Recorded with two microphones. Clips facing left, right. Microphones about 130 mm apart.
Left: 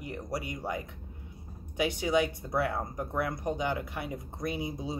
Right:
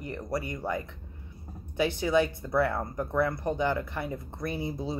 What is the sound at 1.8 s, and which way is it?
Speech, 15° left (ahead or behind).